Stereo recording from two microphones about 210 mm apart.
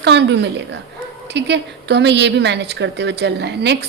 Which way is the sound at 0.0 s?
55° right (ahead or behind).